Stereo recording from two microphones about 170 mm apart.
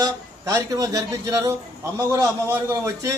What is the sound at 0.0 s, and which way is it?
A man's voice, 20° right (ahead or behind).